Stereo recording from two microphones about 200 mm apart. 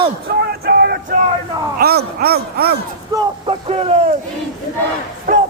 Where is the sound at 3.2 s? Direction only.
25° right (ahead or behind).